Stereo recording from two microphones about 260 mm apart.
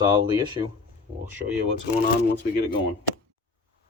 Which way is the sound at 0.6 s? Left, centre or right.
Centre.